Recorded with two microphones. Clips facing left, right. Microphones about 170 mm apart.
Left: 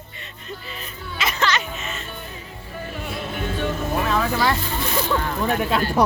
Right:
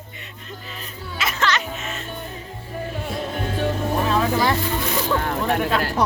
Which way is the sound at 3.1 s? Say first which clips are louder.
Even; 35° right (ahead or behind).